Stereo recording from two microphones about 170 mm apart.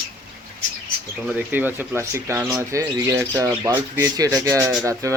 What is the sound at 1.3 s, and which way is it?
Speech, 10° right (ahead or behind).